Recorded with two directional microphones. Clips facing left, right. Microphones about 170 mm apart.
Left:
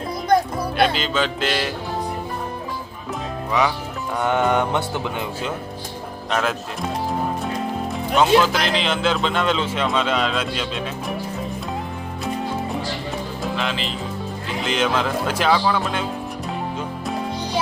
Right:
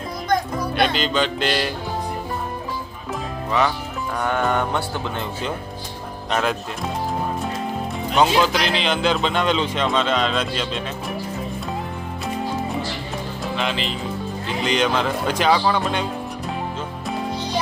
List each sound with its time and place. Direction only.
0.8 s speech: 5° left (ahead or behind)
4.2 s speech: 20° left (ahead or behind); by 6.6 s centre (ahead or behind)
8.1 s speech: centre (ahead or behind)
13.4 s speech: centre (ahead or behind)